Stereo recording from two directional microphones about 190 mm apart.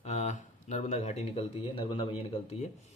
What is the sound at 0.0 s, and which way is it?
Speech, 35° left (ahead or behind).